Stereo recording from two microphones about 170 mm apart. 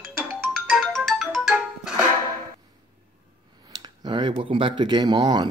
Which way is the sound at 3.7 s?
25° right (ahead or behind).